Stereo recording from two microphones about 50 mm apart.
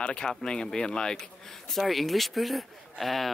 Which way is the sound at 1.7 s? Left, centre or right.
Centre.